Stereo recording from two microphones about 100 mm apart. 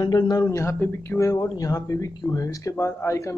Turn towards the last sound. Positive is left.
turn(degrees=30)  # may be behind; listen again after turning